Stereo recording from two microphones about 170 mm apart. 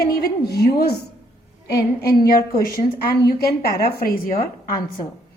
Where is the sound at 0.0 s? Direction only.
60° left (ahead or behind).